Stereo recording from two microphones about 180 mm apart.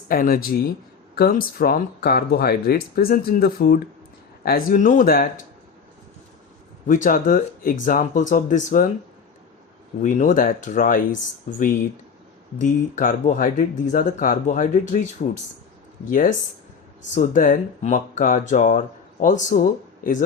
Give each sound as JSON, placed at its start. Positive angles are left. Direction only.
{"t": 0.1, "sound": "speech", "side_deg": 55}
{"t": 6.8, "sound": "speech", "side_deg": 45}
{"t": 10.0, "sound": "speech", "side_deg": 45}
{"t": 12.5, "sound": "speech", "side_deg": 45}